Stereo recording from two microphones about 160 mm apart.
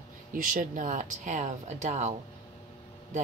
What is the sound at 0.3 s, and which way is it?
Speech, 60° right (ahead or behind).